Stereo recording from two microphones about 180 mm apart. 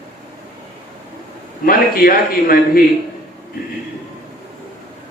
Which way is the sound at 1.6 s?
55° left (ahead or behind).